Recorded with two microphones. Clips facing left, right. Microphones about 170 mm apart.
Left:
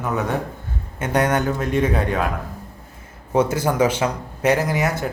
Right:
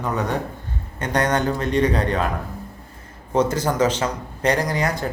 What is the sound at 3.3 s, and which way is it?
Speech, 10° left (ahead or behind).